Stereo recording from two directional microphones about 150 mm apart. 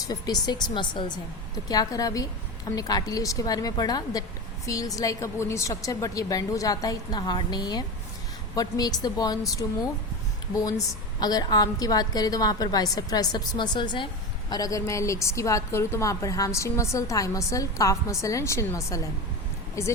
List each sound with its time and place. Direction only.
0.1 s a woman's voice: 25° left (ahead or behind)